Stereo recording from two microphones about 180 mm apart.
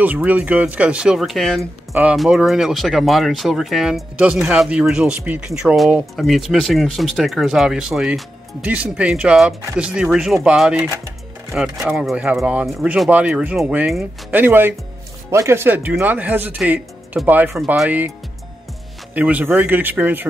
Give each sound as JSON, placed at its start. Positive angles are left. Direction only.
{"t": 0.0, "sound": "speech", "side_deg": -10}
{"t": 19.1, "sound": "speech", "side_deg": -10}